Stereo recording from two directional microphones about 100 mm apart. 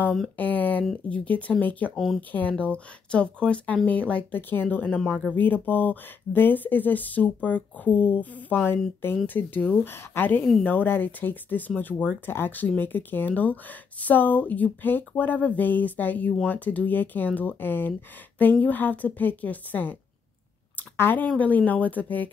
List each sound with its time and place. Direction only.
0.4 s a sound: 15° left (ahead or behind)
0.8 s speech: 10° left (ahead or behind)
2.0 s speech: centre (ahead or behind)
2.3 s speech: 15° left (ahead or behind)